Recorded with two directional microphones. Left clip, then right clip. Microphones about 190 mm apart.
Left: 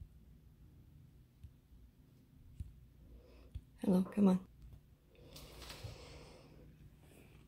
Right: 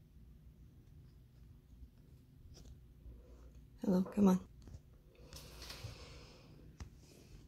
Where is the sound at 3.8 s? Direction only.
5° left (ahead or behind).